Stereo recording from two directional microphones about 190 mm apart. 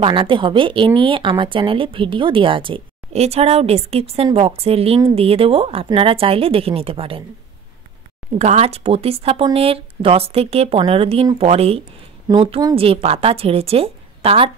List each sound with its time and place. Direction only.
0.0 s a woman's voice: 25° right (ahead or behind)
8.4 s a woman's voice: 35° right (ahead or behind)